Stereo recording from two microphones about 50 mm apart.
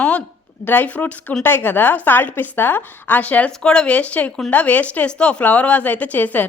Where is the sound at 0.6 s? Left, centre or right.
Left.